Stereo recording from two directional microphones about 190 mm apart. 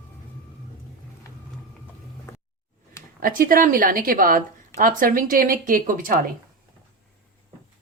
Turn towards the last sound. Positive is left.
turn(degrees=-45)  # may be behind; listen again after turning